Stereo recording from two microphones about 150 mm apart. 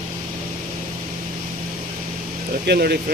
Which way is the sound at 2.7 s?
90° right.